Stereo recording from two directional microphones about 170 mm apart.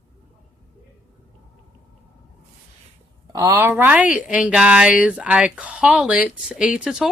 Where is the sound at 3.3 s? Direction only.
20° right (ahead or behind).